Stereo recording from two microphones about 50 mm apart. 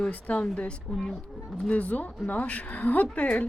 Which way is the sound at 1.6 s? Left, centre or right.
Left.